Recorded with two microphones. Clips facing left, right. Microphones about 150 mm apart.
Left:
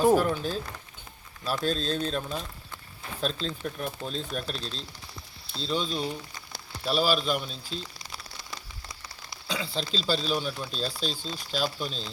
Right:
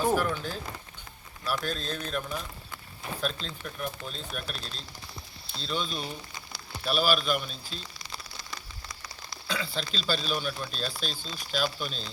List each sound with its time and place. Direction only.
0.0 s speech: 20° left (ahead or behind)
5.5 s speech: 30° left (ahead or behind)
8.9 s rain on surface: 20° left (ahead or behind)
9.9 s speech: 30° left (ahead or behind)